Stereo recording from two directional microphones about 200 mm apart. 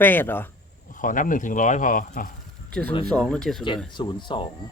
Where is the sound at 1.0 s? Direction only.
40° left (ahead or behind).